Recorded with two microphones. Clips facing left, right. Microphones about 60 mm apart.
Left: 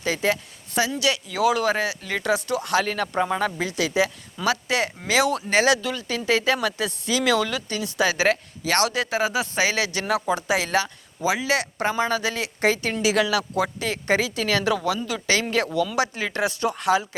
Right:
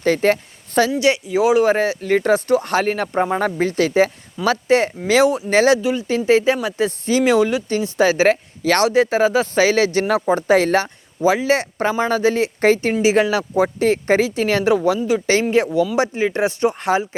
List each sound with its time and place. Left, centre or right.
0.0 s speech: right
0.9 s speech: right
1.7 s speech: right
5.8 s speech: right